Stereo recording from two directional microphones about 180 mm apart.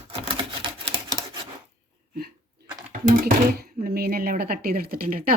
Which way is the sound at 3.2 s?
55° right (ahead or behind).